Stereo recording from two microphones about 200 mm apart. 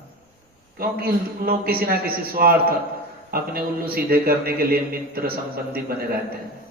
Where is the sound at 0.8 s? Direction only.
50° right (ahead or behind).